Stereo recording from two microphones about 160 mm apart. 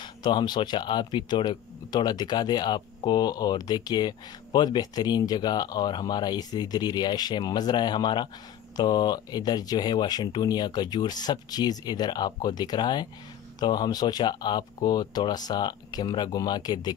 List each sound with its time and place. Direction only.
0.0 s speech: 30° left (ahead or behind)